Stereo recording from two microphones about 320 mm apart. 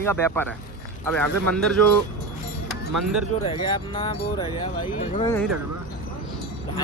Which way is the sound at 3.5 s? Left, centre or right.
Centre.